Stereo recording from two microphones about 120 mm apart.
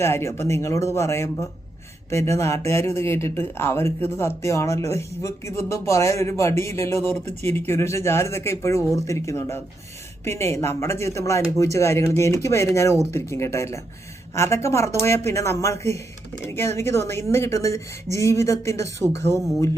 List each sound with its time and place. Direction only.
0.0 s speech: 20° left (ahead or behind)